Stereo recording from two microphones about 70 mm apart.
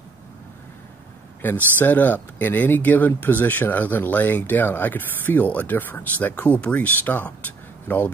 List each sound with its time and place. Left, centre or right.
1.4 s speech: left